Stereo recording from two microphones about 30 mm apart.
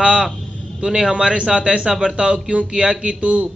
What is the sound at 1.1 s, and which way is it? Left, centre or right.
A man's voice, right.